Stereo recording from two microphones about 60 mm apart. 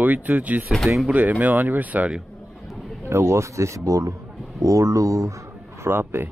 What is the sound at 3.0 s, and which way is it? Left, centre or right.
Speech, right.